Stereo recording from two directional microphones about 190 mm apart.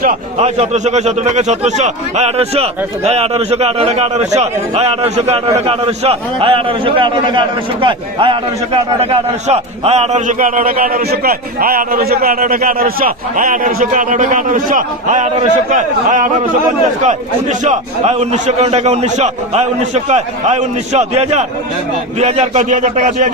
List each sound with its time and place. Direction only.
0.3 s a man's voice: 35° right (ahead or behind)
17.6 s a man's voice: 35° right (ahead or behind)